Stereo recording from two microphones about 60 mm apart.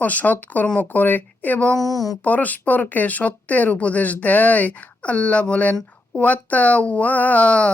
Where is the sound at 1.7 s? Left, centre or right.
Right.